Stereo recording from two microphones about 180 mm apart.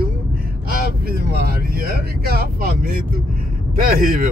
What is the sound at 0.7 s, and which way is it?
Speech, 55° right (ahead or behind).